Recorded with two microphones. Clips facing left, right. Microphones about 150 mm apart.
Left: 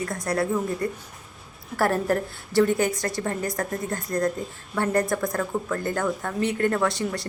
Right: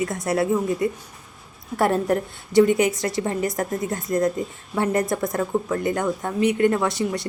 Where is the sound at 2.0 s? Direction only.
15° right (ahead or behind).